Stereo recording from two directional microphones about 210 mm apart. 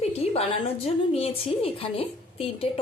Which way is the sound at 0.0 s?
30° left (ahead or behind).